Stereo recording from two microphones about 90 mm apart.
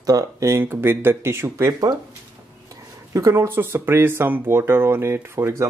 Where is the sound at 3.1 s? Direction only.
35° right (ahead or behind).